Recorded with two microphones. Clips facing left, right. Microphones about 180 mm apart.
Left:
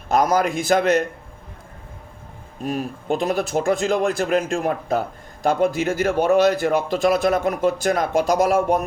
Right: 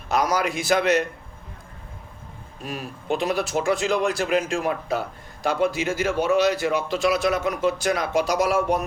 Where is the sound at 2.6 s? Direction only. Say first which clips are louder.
Left 8 dB; 45° left (ahead or behind).